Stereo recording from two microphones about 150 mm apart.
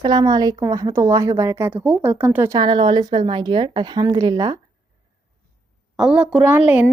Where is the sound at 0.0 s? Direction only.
25° right (ahead or behind).